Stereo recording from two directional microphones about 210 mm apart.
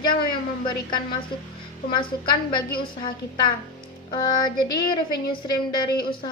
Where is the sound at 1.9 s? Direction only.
20° left (ahead or behind).